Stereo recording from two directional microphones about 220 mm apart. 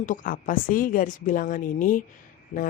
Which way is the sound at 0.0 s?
35° left (ahead or behind).